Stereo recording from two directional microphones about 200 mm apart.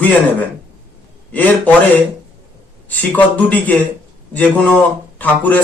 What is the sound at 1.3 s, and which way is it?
A man's voice, 10° left (ahead or behind).